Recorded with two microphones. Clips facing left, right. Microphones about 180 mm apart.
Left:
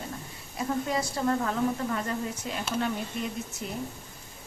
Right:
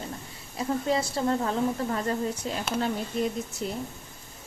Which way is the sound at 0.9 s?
25° right (ahead or behind).